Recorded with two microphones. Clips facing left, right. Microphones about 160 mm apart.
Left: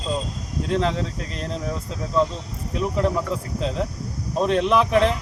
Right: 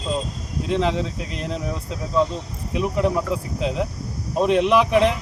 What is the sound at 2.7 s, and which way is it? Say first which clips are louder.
Speech: right 1 dB; 5° right (ahead or behind).